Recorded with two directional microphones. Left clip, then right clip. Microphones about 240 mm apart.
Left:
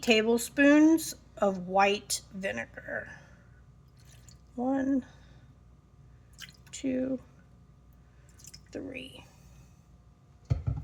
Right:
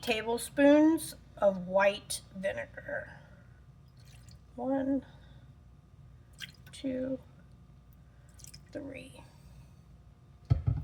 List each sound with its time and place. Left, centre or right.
0.0 s speech: left
4.6 s speech: left
6.7 s speech: left
8.7 s speech: left